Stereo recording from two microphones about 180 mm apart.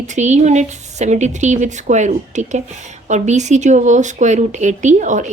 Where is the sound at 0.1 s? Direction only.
40° right (ahead or behind).